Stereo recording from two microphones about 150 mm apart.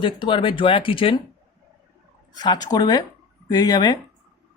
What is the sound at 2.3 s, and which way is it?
Speech, 30° left (ahead or behind).